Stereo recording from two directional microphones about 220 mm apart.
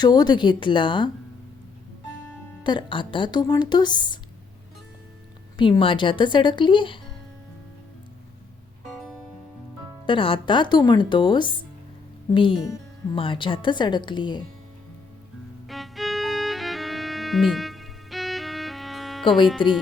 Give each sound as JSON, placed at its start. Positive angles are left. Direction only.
{"t": 0.0, "sound": "speech", "side_deg": 20}
{"t": 2.6, "sound": "speech", "side_deg": 20}
{"t": 5.5, "sound": "speech", "side_deg": 20}
{"t": 8.9, "sound": "music", "side_deg": 0}
{"t": 10.1, "sound": "speech", "side_deg": 25}
{"t": 15.6, "sound": "music", "side_deg": 0}